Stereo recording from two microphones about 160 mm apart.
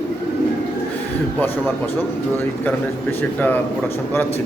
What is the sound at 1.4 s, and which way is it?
Speech, 15° left (ahead or behind).